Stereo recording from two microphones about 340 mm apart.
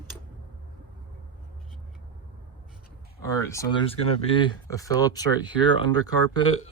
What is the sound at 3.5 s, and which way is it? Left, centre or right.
Speech, centre.